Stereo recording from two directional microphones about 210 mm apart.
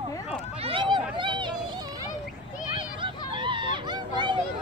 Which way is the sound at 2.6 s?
25° right (ahead or behind).